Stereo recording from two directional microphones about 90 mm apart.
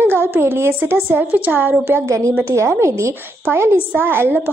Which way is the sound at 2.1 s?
35° right (ahead or behind).